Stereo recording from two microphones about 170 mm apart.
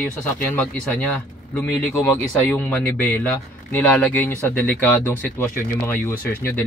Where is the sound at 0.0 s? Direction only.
10° left (ahead or behind).